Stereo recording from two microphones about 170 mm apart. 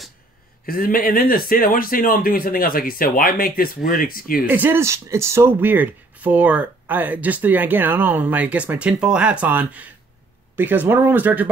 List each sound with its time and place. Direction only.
0.7 s speech: 60° left (ahead or behind)
4.5 s speech: 10° right (ahead or behind)